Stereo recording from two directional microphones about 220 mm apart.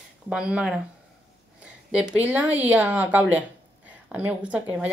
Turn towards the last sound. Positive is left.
turn(degrees=-5)  # may be behind; listen again after turning